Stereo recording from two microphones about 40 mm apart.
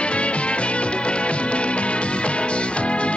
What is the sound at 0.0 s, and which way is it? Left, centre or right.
Music, left.